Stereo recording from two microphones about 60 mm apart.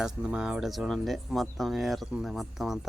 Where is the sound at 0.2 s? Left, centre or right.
Centre.